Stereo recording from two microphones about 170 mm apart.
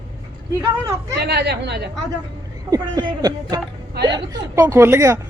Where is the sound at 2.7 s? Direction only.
20° right (ahead or behind).